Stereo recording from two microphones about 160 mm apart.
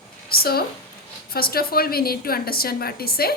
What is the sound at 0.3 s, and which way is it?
A woman's voice, 70° left (ahead or behind).